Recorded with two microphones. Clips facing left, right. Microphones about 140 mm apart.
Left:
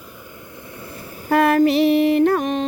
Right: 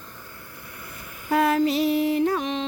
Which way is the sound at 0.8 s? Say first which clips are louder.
Left 7 dB; 30° left (ahead or behind).